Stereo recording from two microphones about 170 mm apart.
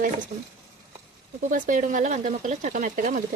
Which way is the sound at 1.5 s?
50° right (ahead or behind).